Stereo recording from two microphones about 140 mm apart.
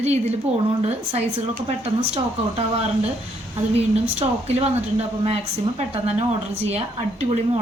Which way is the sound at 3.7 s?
45° right (ahead or behind).